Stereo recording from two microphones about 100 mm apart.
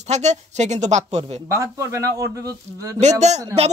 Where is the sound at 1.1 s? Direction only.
90° right.